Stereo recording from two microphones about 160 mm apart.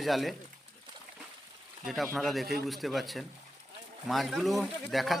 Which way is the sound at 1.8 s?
Centre (ahead or behind).